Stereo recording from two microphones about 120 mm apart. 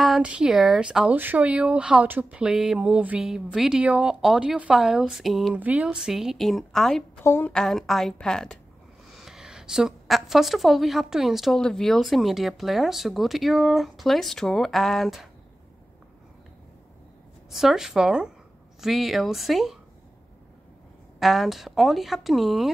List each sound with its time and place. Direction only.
0.0 s speech: 5° right (ahead or behind)
5.5 s speech: 10° right (ahead or behind); by 7.1 s 5° left (ahead or behind)
7.2 s a woman's voice: 20° left (ahead or behind)
7.5 s speech: 5° left (ahead or behind)
17.5 s speech: 5° right (ahead or behind)
21.2 s speech: centre (ahead or behind)